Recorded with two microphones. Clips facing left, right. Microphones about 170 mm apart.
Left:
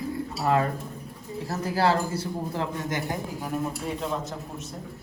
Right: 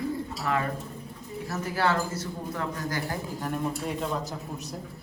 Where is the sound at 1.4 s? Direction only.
35° left (ahead or behind).